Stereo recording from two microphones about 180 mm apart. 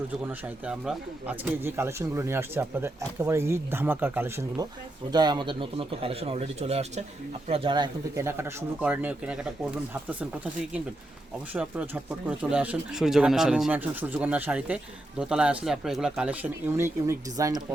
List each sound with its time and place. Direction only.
0.3 s a man's voice: 5° right (ahead or behind)
12.4 s speech: 5° right (ahead or behind)